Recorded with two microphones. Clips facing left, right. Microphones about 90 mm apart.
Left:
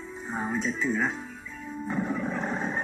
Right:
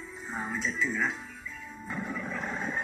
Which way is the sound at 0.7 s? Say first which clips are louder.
Left 1 dB; 35° left (ahead or behind).